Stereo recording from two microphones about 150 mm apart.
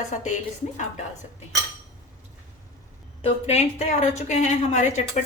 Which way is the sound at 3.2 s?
45° left (ahead or behind).